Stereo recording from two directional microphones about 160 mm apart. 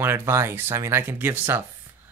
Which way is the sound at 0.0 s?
15° right (ahead or behind).